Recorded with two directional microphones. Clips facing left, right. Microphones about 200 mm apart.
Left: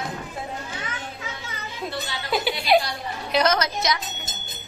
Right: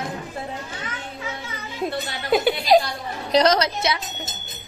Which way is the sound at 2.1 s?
50° right (ahead or behind).